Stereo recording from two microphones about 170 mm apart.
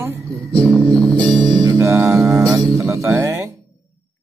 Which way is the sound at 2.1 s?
Centre (ahead or behind).